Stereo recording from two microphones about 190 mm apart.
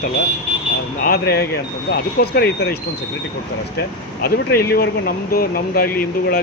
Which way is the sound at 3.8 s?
55° left (ahead or behind).